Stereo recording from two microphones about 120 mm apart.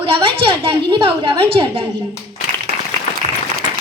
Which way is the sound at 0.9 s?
45° right (ahead or behind).